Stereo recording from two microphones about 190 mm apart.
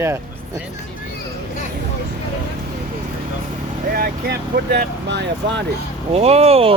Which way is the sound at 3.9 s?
50° right (ahead or behind).